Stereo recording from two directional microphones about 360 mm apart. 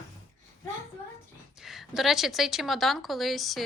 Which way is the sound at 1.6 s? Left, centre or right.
Centre.